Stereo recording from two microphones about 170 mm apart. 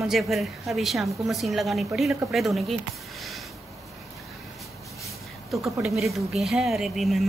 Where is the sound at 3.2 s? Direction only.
Centre (ahead or behind).